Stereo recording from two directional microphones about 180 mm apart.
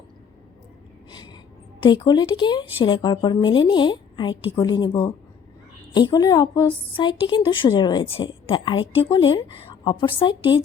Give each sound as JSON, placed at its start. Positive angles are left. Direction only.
{"t": 1.8, "sound": "speech", "side_deg": 25}